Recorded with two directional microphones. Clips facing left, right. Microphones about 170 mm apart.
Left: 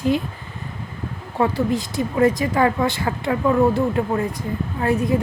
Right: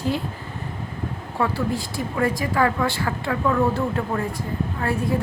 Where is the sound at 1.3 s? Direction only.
20° left (ahead or behind).